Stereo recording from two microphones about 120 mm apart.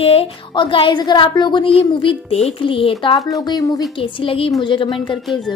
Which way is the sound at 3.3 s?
30° left (ahead or behind).